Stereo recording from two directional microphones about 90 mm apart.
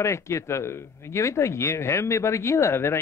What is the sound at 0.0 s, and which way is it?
Speech, 35° left (ahead or behind).